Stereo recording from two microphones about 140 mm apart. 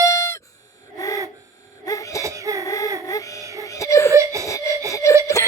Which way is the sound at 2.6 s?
25° left (ahead or behind).